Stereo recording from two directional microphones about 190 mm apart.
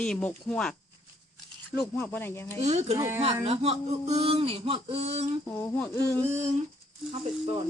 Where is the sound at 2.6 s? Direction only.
35° right (ahead or behind).